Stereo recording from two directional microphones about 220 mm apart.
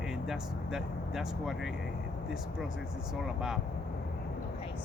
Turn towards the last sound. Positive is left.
turn(degrees=0)  # may be behind; listen again after turning